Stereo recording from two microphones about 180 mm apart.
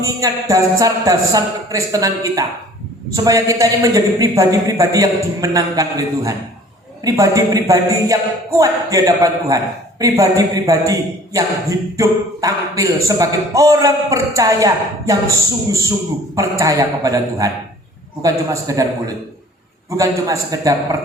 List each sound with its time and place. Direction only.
0.0 s speech: 20° right (ahead or behind)
16.3 s speech: 15° right (ahead or behind)